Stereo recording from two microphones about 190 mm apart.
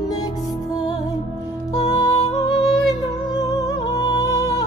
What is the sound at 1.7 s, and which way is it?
Music, 20° left (ahead or behind).